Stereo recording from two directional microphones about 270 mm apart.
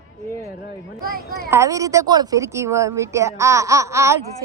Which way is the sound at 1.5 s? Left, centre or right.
Centre.